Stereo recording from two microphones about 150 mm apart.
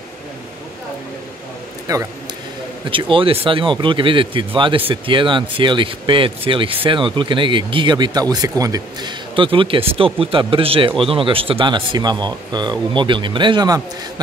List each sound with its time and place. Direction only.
2.9 s speech: 35° right (ahead or behind)